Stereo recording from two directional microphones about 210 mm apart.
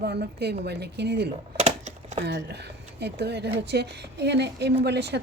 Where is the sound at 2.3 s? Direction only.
55° right (ahead or behind).